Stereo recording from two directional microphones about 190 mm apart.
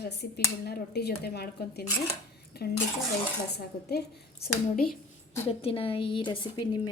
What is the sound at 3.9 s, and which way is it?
Speech, 55° left (ahead or behind).